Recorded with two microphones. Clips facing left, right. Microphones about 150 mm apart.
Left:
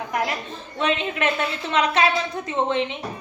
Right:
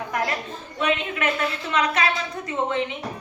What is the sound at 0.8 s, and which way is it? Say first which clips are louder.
A woman's voice: left 1 dB; 30° left (ahead or behind).